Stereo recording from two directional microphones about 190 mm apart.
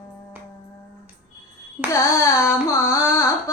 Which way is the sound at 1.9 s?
15° left (ahead or behind).